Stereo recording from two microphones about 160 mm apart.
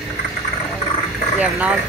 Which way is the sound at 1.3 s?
10° right (ahead or behind).